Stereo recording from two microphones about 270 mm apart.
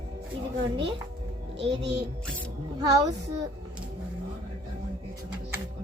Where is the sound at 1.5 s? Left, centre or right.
Right.